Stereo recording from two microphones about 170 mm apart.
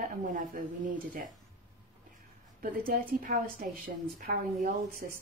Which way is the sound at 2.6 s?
55° right (ahead or behind).